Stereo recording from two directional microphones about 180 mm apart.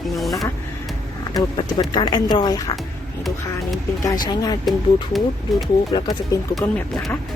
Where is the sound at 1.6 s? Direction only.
25° left (ahead or behind).